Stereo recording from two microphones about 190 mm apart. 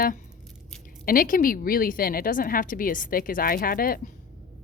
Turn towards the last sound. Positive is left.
turn(degrees=50)  # may be behind; listen again after turning